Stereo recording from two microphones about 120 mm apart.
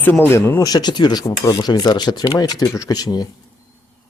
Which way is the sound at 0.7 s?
35° left (ahead or behind).